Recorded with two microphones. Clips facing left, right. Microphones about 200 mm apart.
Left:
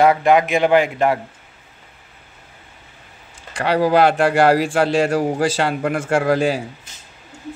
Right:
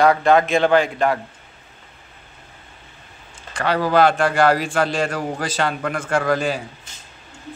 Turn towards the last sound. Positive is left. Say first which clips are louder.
# left 3 dB
turn(degrees=30)  # may be behind; listen again after turning